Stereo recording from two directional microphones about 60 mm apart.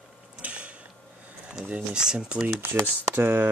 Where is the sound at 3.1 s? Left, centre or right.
Right.